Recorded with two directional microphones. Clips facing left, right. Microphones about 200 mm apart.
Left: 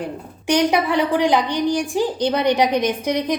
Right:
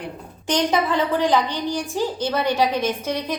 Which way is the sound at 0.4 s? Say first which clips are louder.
Left 3 dB; 10° left (ahead or behind).